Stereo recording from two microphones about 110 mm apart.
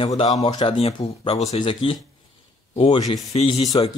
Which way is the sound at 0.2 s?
70° left (ahead or behind).